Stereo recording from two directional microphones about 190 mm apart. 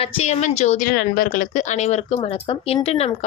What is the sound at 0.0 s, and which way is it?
A woman's voice, 35° left (ahead or behind).